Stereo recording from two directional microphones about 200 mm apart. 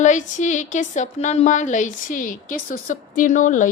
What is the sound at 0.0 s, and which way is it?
A woman's voice, 40° left (ahead or behind).